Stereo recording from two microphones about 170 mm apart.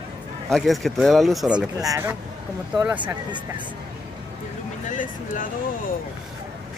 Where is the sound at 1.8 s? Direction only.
20° right (ahead or behind).